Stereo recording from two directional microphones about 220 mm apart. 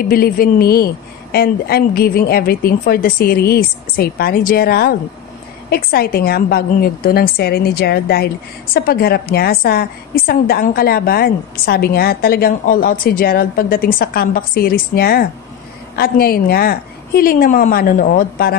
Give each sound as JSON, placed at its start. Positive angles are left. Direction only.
{"t": 0.1, "sound": "a woman's voice", "side_deg": 40}